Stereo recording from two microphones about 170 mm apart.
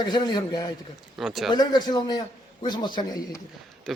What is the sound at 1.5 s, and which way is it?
Speech, 25° left (ahead or behind).